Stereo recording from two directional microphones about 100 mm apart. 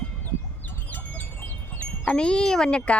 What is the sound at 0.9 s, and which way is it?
Wind chime, 20° left (ahead or behind).